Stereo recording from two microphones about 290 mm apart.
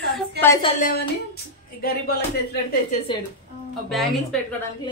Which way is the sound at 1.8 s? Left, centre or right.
Left.